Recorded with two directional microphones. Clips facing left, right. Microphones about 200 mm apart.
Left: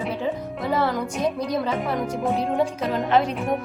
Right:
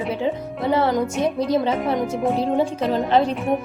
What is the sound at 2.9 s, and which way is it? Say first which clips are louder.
Speech: right 3 dB; 30° right (ahead or behind).